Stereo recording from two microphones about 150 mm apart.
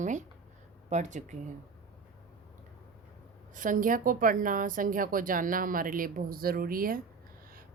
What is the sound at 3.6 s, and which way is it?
A woman's voice, 60° right (ahead or behind).